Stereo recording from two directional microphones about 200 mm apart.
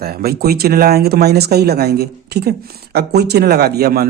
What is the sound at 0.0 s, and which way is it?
Speech, 50° right (ahead or behind).